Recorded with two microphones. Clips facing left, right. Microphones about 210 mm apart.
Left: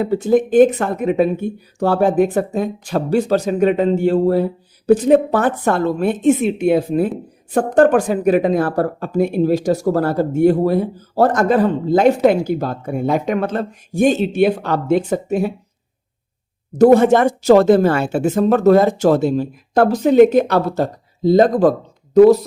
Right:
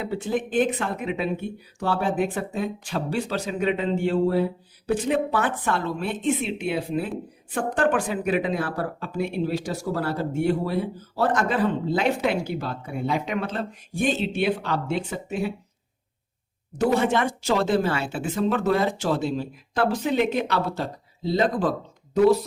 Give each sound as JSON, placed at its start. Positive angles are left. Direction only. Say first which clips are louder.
{"t": 0.0, "sound": "speech", "louder": "left 11 dB", "side_deg": 40}
{"t": 16.7, "sound": "speech", "louder": "left 11 dB", "side_deg": 45}